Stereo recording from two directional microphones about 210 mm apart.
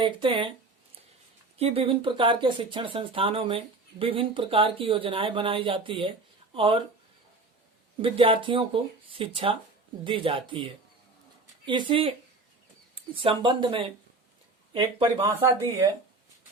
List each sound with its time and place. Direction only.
0.0 s speech: 25° right (ahead or behind)
1.5 s speech: 30° right (ahead or behind)
8.0 s speech: 25° right (ahead or behind)
13.1 s speech: 25° right (ahead or behind)